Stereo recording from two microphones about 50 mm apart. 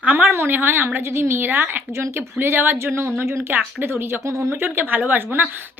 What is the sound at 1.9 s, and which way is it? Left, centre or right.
Speech, right.